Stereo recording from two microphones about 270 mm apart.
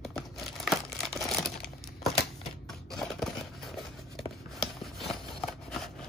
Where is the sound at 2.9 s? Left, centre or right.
Centre.